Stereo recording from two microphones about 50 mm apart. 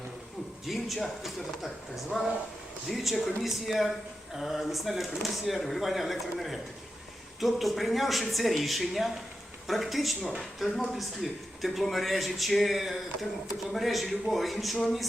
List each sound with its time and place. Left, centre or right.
0.6 s a man's voice: centre